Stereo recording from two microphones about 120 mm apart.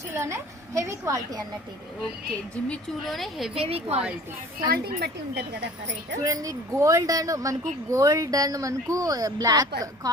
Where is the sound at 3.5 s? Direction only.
55° right (ahead or behind).